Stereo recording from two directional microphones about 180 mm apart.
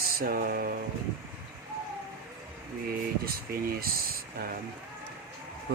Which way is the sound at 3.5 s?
55° right (ahead or behind).